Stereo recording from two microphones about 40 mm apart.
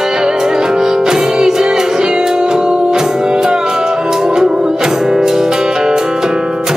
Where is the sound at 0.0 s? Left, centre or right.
Centre.